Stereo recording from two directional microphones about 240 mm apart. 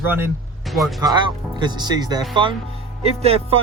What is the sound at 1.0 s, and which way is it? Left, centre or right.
Speech, centre.